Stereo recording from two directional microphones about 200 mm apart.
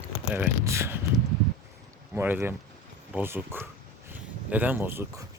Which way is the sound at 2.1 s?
10° right (ahead or behind).